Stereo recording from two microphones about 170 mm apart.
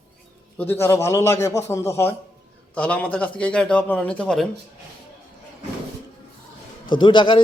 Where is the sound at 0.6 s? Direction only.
15° left (ahead or behind).